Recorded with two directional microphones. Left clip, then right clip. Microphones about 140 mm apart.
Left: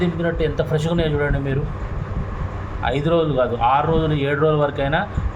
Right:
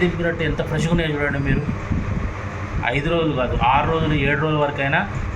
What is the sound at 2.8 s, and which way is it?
A man's voice, 90° left.